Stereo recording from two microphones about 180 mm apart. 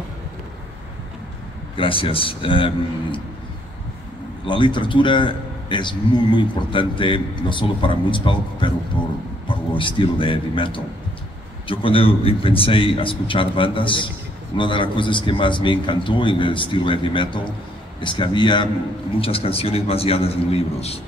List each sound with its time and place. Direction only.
1.8 s a man's voice: 30° left (ahead or behind)
4.5 s a man's voice: 25° left (ahead or behind)
9.8 s a man's voice: 30° left (ahead or behind)